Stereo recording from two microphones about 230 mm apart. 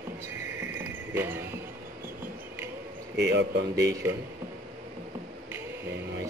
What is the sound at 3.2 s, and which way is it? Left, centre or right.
Speech, right.